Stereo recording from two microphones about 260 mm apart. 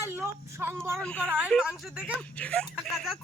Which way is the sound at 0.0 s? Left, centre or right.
Centre.